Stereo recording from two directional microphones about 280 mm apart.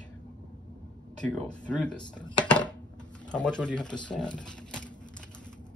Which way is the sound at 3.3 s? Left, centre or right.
Centre.